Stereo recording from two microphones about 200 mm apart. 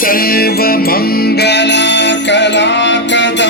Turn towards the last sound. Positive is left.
turn(degrees=65)  # may be behind; listen again after turning